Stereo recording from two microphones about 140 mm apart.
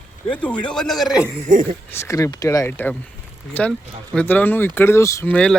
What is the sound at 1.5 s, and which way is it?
Speech, 65° right (ahead or behind).